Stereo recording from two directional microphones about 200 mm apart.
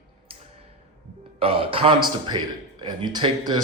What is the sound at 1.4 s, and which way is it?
Speech, 25° right (ahead or behind).